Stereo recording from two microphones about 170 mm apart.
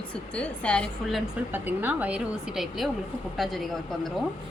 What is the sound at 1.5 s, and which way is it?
Speech, 10° right (ahead or behind).